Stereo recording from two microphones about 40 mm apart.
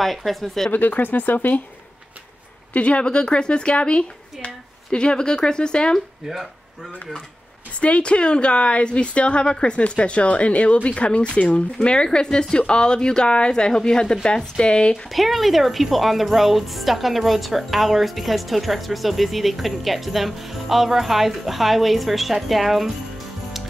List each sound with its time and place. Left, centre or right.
0.0 s speech: centre
0.7 s speech: left
2.7 s a woman's voice: left
7.8 s a woman's voice: left
15.0 s speech: centre